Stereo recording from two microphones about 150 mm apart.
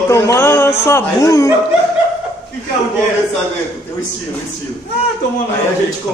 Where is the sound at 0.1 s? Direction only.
15° left (ahead or behind).